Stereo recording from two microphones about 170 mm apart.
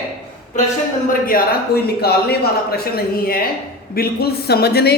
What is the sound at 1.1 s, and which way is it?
Speech, 55° left (ahead or behind).